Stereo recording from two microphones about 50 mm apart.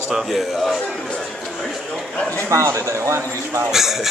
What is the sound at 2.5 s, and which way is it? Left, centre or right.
Speech, right.